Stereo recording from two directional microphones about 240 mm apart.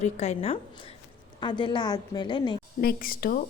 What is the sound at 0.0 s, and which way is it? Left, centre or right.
A woman's voice, left.